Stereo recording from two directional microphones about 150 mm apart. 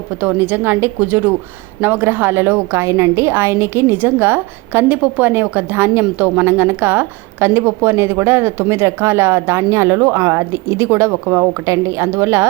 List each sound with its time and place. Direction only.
0.2 s a woman's voice: 10° right (ahead or behind)